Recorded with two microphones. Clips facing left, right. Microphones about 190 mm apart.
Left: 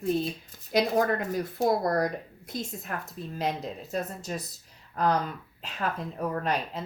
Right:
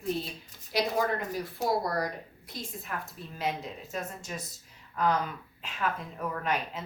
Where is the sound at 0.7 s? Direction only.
50° left (ahead or behind).